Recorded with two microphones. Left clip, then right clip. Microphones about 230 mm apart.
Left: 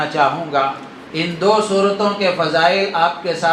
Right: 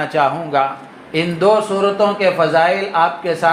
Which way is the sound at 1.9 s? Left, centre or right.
Right.